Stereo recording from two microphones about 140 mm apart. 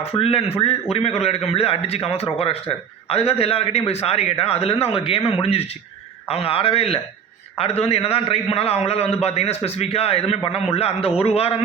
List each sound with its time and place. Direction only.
0.2 s a man's voice: 45° left (ahead or behind)